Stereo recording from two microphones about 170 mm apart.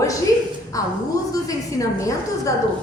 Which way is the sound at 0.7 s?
20° left (ahead or behind).